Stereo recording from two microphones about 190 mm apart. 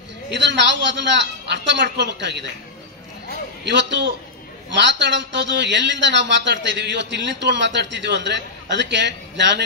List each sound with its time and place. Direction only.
0.3 s a man's voice: 65° right (ahead or behind)
3.6 s a man's voice: 65° right (ahead or behind)